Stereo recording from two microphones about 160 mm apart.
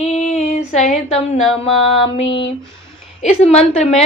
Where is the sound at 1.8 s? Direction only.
35° left (ahead or behind).